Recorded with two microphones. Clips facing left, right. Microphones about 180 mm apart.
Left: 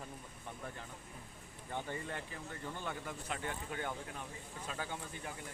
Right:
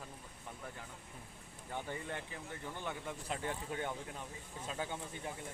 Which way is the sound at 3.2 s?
25° right (ahead or behind).